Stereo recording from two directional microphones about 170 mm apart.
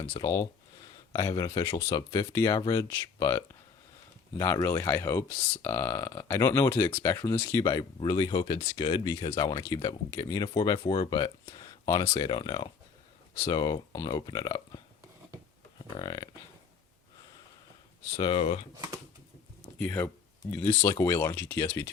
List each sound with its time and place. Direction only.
0.2 s speech: 20° left (ahead or behind)
1.6 s speech: 15° left (ahead or behind)
15.9 s speech: 25° left (ahead or behind)
18.2 s speech: 30° left (ahead or behind)
19.8 s speech: 10° left (ahead or behind)